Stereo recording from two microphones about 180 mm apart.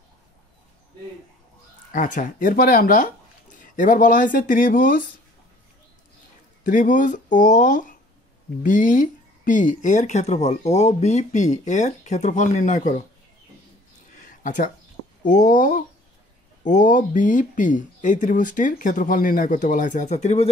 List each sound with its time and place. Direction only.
1.9 s speech: 50° left (ahead or behind)
6.6 s speech: 45° left (ahead or behind)
14.1 s a sound: 45° left (ahead or behind)
15.2 s speech: 45° left (ahead or behind)